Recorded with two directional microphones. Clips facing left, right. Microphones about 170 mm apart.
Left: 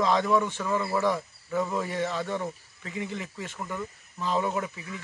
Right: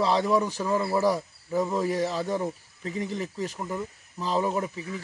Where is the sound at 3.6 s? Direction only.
25° right (ahead or behind).